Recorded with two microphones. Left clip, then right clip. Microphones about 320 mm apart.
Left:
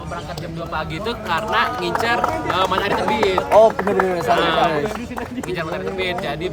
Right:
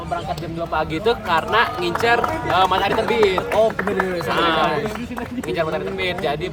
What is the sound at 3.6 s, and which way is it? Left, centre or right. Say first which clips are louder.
Speech: left 6 dB; centre.